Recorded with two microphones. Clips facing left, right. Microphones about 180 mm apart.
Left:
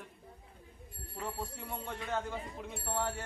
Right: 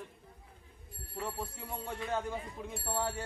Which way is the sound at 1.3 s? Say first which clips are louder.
Even; 10° right (ahead or behind).